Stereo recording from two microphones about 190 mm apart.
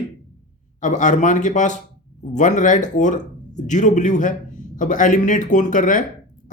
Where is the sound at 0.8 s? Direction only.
40° left (ahead or behind).